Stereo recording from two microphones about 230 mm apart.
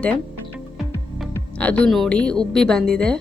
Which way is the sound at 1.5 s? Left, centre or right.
Centre.